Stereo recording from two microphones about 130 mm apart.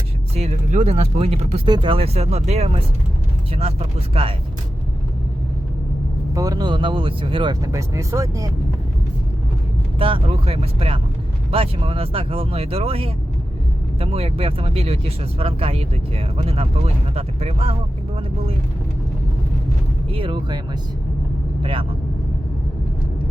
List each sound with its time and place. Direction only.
0.3 s speech: 65° right (ahead or behind)
1.6 s speech: 35° right (ahead or behind)
6.3 s speech: 25° right (ahead or behind); by 7.5 s 40° right (ahead or behind)
7.6 s speech: 25° right (ahead or behind)
10.0 s speech: 45° right (ahead or behind)
20.1 s speech: 40° right (ahead or behind)
21.6 s speech: 40° right (ahead or behind)